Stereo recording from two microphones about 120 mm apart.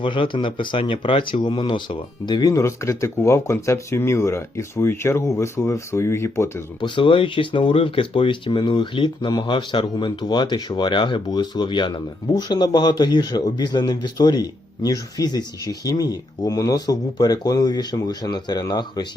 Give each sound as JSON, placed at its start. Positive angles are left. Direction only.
{"t": 0.0, "sound": "speech", "side_deg": 45}
{"t": 6.8, "sound": "speech", "side_deg": 45}